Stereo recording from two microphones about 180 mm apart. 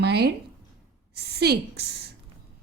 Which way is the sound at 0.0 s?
65° right (ahead or behind).